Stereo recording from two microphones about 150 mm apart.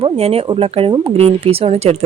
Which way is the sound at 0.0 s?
40° right (ahead or behind).